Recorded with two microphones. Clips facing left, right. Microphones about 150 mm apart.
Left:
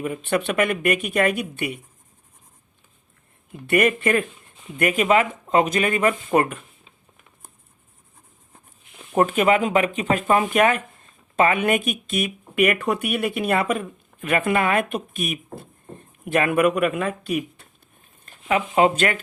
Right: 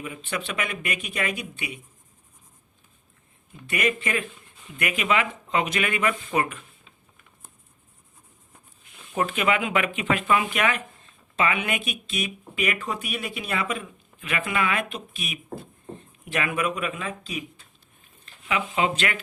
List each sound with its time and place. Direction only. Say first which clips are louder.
0.0 s speech: left 9 dB; 55° left (ahead or behind)
3.7 s speech: left 7 dB; 55° left (ahead or behind)
9.1 s speech: left 6 dB; 45° left (ahead or behind)
18.3 s speech: left 6 dB; 45° left (ahead or behind)